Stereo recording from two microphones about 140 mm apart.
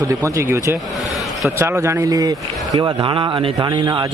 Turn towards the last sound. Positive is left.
turn(degrees=-30)  # may be behind; listen again after turning